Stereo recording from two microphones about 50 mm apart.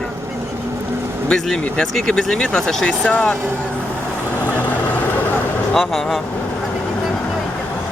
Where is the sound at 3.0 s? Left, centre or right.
Left.